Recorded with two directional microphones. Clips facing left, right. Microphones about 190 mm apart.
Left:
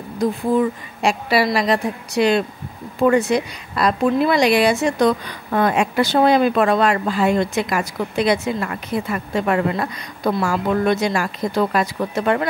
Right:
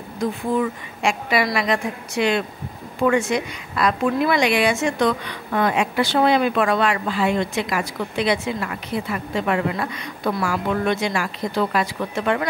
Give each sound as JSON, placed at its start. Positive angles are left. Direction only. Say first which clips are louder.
{"t": 0.2, "sound": "a woman's voice", "louder": "left 4 dB", "side_deg": 35}